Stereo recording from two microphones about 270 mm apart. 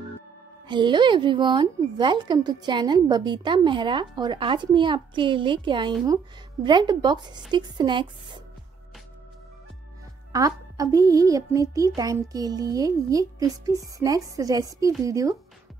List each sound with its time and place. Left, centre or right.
0.7 s a woman's voice: centre
10.3 s a woman's voice: centre